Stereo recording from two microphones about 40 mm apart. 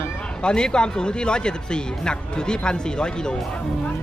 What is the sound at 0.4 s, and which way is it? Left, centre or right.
Speech, left.